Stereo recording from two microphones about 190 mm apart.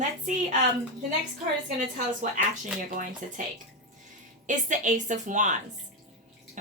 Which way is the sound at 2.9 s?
45° right (ahead or behind).